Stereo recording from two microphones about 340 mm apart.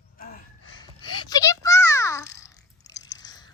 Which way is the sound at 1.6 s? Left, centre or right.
Centre.